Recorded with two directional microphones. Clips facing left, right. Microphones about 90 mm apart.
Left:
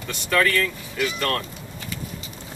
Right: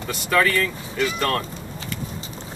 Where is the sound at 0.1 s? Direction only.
5° right (ahead or behind).